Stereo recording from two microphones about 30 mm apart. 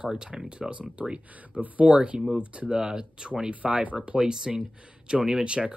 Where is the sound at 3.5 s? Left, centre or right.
Right.